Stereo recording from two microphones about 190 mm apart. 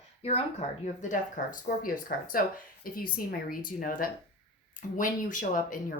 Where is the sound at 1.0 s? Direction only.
45° left (ahead or behind).